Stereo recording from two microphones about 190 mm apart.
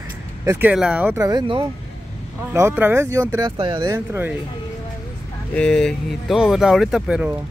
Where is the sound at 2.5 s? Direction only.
10° right (ahead or behind).